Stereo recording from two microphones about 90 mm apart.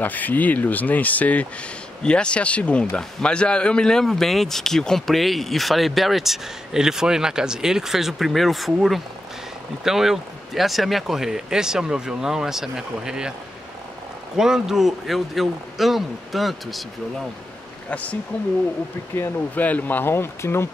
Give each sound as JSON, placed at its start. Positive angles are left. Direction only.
{"t": 0.0, "sound": "a man's voice", "side_deg": 20}
{"t": 14.3, "sound": "a man's voice", "side_deg": -5}
{"t": 17.8, "sound": "speech", "side_deg": 15}